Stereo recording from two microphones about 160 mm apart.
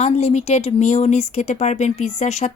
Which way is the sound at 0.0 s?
40° left (ahead or behind).